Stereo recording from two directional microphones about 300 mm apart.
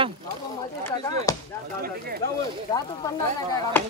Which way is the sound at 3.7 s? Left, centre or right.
Centre.